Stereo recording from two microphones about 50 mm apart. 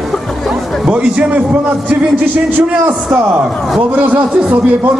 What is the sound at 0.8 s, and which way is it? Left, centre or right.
Speech, right.